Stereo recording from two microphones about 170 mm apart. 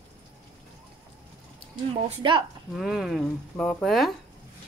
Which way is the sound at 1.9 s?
30° right (ahead or behind).